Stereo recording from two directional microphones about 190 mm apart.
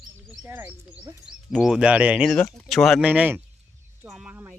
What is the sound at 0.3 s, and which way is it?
Speech, 10° right (ahead or behind).